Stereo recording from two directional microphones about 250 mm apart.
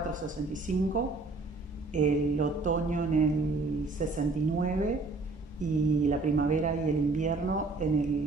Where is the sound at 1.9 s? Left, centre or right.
Right.